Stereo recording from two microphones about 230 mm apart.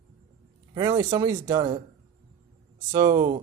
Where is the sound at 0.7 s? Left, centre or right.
Centre.